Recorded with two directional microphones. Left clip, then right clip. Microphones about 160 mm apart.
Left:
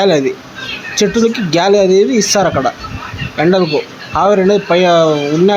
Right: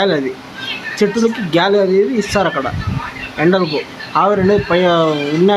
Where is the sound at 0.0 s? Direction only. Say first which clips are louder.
Left 4 dB; 20° left (ahead or behind).